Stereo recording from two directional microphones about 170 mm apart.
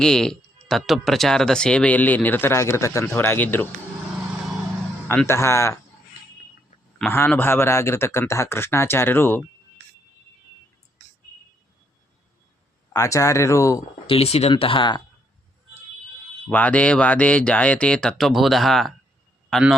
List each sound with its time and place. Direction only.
0.0 s speech: 5° left (ahead or behind)
5.0 s speech: 15° left (ahead or behind)
7.1 s speech: 10° left (ahead or behind)
12.9 s speech: 20° left (ahead or behind)
14.1 s speech: 35° left (ahead or behind)
16.5 s a man's voice: 10° left (ahead or behind)